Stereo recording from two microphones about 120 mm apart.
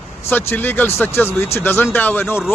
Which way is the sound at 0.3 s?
15° left (ahead or behind).